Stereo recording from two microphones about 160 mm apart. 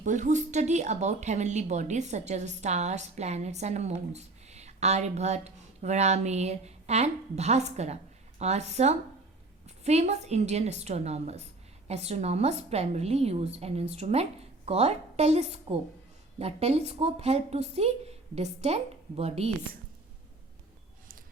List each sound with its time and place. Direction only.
0.0 s a woman's voice: 50° right (ahead or behind)